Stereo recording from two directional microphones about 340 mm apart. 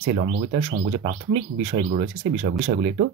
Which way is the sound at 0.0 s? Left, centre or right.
Right.